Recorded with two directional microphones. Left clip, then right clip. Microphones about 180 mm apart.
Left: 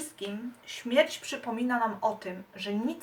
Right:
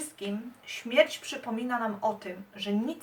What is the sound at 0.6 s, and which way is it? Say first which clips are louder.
Speech: right 1 dB; 10° left (ahead or behind).